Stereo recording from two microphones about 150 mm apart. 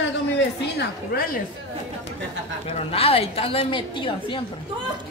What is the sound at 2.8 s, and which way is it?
A woman's voice, 40° left (ahead or behind).